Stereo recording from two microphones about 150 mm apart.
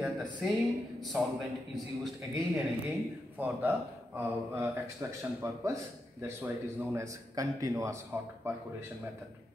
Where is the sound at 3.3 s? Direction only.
10° right (ahead or behind).